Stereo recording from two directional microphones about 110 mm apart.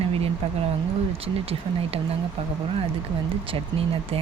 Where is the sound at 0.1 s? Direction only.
60° right (ahead or behind).